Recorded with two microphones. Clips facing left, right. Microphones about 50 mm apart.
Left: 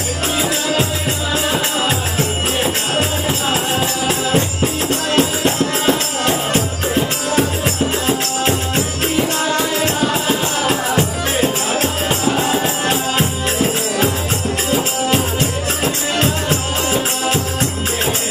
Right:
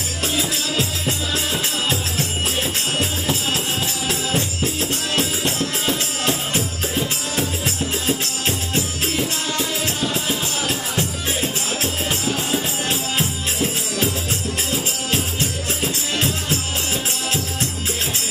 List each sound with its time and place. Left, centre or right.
1.9 s music: centre
8.1 s music: left
9.9 s music: left